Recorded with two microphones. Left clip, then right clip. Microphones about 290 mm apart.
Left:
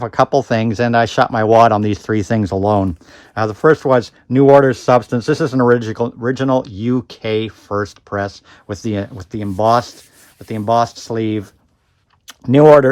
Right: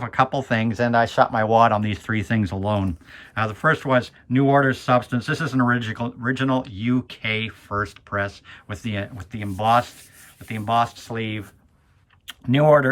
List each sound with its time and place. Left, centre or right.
0.0 s speech: centre